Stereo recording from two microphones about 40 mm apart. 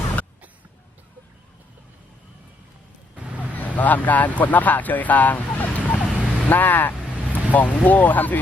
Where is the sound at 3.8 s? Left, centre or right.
Left.